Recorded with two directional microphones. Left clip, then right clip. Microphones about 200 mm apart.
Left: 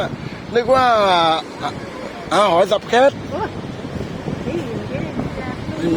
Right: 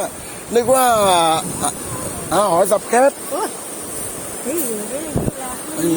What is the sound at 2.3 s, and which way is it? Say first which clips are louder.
Speech: left 1 dB; centre (ahead or behind).